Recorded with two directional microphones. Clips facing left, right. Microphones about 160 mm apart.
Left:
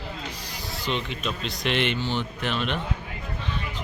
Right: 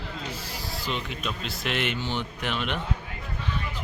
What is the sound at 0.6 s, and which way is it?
Speech, centre (ahead or behind).